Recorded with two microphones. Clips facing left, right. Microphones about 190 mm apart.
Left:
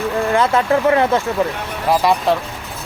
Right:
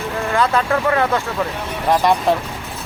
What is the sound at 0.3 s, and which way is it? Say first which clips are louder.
Speech: left 1 dB; 20° left (ahead or behind).